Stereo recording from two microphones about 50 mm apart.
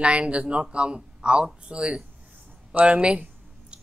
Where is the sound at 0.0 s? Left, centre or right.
Right.